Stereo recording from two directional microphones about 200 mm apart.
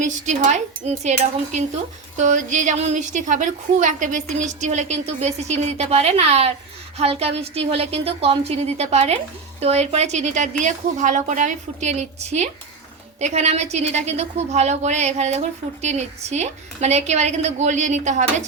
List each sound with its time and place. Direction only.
0.0 s a woman's voice: 35° right (ahead or behind)